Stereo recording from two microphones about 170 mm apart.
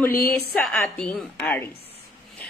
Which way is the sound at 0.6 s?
5° left (ahead or behind).